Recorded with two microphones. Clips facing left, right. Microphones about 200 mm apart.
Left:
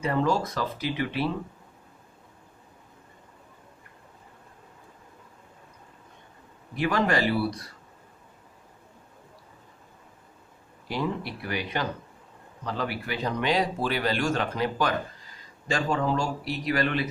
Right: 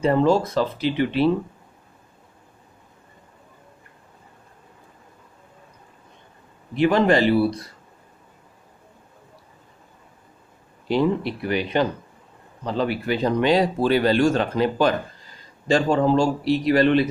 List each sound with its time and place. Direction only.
0.0 s speech: 25° right (ahead or behind)
6.7 s speech: 25° right (ahead or behind)
10.9 s speech: 25° right (ahead or behind)